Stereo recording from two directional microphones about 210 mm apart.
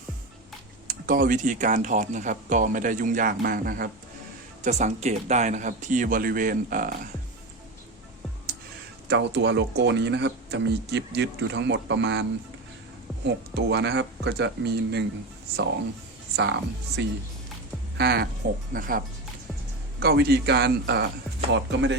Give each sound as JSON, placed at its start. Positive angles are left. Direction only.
{"t": 0.9, "sound": "speech", "side_deg": -40}
{"t": 9.0, "sound": "speech", "side_deg": -55}
{"t": 13.2, "sound": "speech", "side_deg": -55}
{"t": 16.3, "sound": "a man's voice", "side_deg": -55}